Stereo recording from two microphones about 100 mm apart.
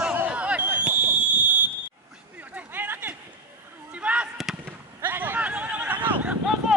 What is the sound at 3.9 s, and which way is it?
Basketball bounce, 15° right (ahead or behind).